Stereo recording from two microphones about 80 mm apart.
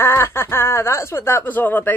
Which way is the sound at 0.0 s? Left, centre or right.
Left.